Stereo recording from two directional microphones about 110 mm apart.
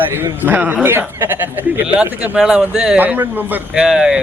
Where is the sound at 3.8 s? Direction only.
5° right (ahead or behind).